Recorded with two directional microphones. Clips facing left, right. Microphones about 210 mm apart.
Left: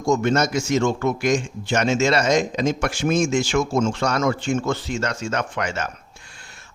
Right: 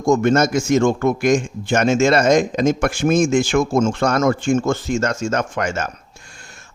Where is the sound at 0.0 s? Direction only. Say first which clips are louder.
Right 4 dB; 50° right (ahead or behind).